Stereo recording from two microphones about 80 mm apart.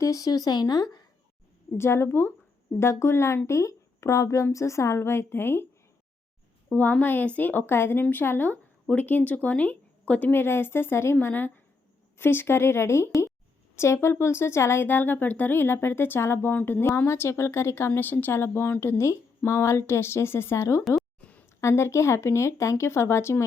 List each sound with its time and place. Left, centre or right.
0.0 s speech: left
1.8 s a woman's voice: left
6.7 s a woman's voice: left
21.2 s a sound: centre
21.6 s a woman's voice: left